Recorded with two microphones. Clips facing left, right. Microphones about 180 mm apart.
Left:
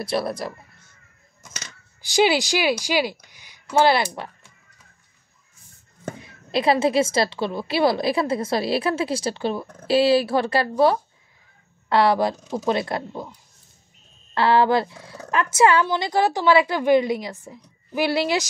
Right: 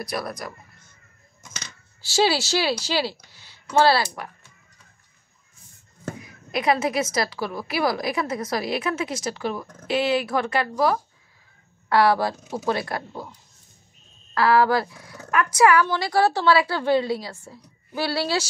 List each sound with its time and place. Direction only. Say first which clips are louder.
0.0 s speech: left 5 dB; 25° left (ahead or behind)
2.0 s a woman's voice: left 2 dB; 15° left (ahead or behind)
6.1 s speech: left 5 dB; 30° left (ahead or behind)